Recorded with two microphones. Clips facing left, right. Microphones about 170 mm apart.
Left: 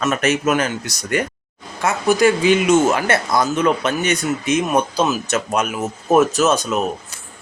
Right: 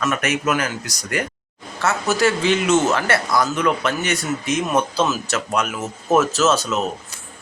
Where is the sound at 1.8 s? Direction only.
15° left (ahead or behind).